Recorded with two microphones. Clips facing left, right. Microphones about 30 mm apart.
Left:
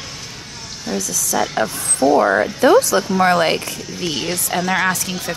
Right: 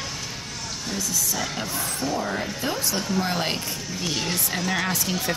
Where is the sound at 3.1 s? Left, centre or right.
Left.